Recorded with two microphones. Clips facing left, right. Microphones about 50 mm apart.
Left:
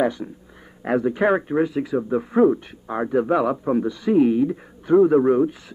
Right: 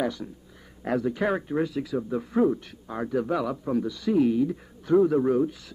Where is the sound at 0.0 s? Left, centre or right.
Left.